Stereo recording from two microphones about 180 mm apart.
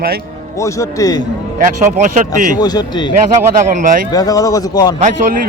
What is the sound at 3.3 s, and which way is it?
Speech, 45° right (ahead or behind).